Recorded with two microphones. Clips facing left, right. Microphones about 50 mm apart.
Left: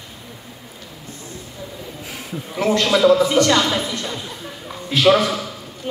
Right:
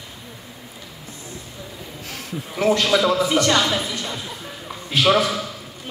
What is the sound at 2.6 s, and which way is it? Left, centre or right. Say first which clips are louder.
A woman's voice: left 2 dB; centre.